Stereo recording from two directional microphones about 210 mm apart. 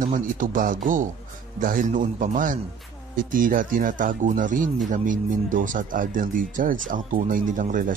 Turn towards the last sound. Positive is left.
turn(degrees=-40)  # may be behind; listen again after turning